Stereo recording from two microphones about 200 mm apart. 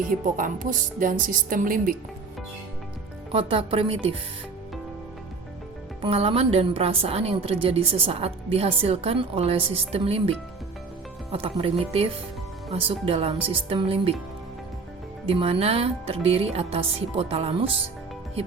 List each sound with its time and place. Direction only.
0.3 s speech: 40° right (ahead or behind)
3.3 s a woman's voice: 30° right (ahead or behind)
6.0 s a woman's voice: 30° right (ahead or behind)
15.3 s a woman's voice: 30° right (ahead or behind)